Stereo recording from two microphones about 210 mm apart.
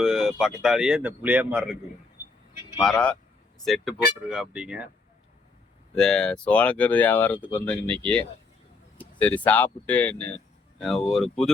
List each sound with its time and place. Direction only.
0.0 s speech: centre (ahead or behind)
2.8 s speech: 5° left (ahead or behind)
6.0 s speech: 5° left (ahead or behind)
9.0 s a sound: 5° left (ahead or behind)
9.5 s speech: 5° left (ahead or behind)